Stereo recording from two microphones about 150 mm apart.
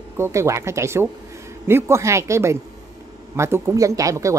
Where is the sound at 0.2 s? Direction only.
20° right (ahead or behind).